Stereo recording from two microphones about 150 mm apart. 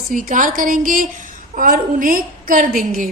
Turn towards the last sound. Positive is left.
turn(degrees=-65)  # may be behind; listen again after turning